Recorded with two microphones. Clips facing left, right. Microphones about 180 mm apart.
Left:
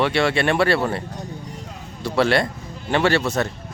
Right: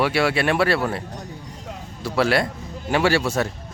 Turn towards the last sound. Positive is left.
turn(degrees=-10)  # may be behind; listen again after turning